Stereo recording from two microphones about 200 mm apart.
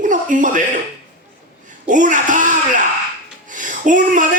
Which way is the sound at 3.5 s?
40° right (ahead or behind).